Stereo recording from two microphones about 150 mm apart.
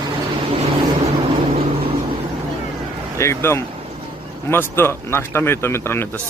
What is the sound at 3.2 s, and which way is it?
A man's voice, 20° left (ahead or behind).